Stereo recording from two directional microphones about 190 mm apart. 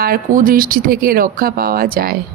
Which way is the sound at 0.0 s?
45° right (ahead or behind).